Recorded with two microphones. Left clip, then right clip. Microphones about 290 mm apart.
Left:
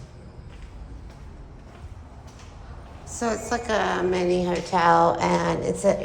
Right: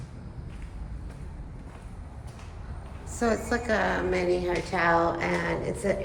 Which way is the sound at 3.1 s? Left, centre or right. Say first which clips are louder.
Left 1 dB; centre.